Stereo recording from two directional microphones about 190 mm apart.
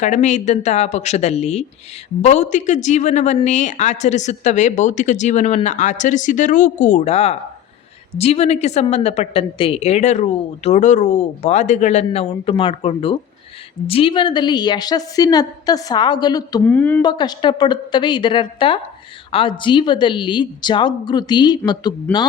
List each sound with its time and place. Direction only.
0.0 s a woman's voice: 40° left (ahead or behind); by 16.6 s 20° left (ahead or behind)
16.6 s speech: 10° left (ahead or behind)
17.0 s a woman's voice: 25° left (ahead or behind)
22.1 s speech: 5° left (ahead or behind)